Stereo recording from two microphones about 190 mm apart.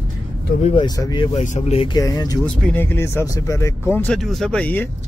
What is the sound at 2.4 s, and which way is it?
Speech, 5° left (ahead or behind).